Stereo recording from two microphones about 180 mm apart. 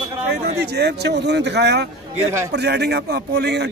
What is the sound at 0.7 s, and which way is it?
A man's voice, 65° right (ahead or behind).